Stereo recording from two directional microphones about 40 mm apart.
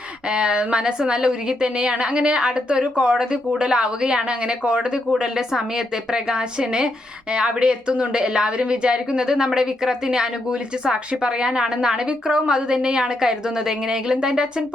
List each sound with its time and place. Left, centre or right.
0.3 s a woman's voice: right
6.1 s a woman's voice: right